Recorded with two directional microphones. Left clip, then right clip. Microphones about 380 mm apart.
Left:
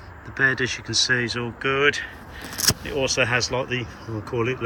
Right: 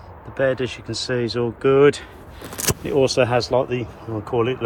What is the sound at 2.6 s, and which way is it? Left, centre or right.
Vehicle, centre.